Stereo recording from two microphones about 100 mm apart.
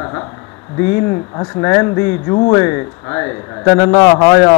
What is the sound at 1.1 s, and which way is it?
A man's voice, 35° left (ahead or behind).